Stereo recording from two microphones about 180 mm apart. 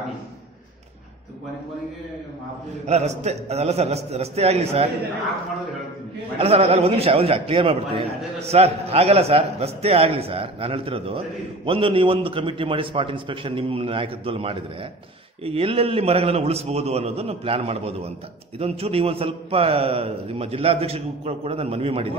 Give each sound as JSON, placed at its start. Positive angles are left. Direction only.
{"t": 2.9, "sound": "a man's voice", "side_deg": -35}
{"t": 6.3, "sound": "a man's voice", "side_deg": -35}